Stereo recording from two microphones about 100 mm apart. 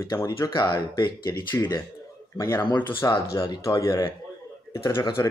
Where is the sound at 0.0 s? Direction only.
35° left (ahead or behind).